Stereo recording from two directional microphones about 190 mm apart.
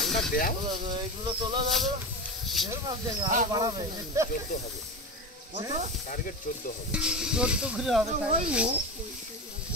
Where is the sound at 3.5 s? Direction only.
20° right (ahead or behind).